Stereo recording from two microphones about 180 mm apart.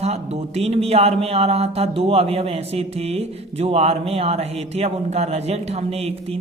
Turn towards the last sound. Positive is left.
turn(degrees=-35)  # may be behind; listen again after turning